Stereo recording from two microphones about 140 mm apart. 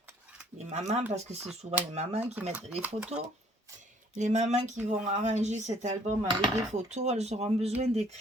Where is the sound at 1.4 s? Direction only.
5° right (ahead or behind).